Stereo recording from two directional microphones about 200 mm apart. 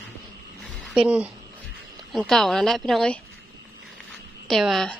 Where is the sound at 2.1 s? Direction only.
Centre (ahead or behind).